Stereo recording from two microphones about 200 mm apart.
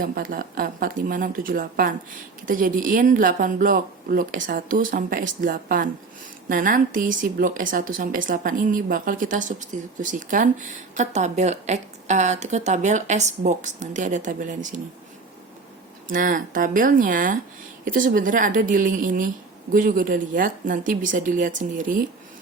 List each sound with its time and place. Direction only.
0.0 s a woman's voice: 45° right (ahead or behind)
16.0 s a woman's voice: 40° right (ahead or behind)